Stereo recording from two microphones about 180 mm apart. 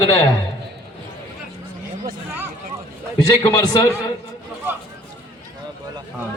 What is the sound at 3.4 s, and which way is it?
Speech, 20° left (ahead or behind).